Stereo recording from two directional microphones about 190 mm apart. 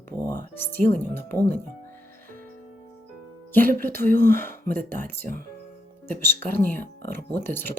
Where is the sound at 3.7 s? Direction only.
45° right (ahead or behind).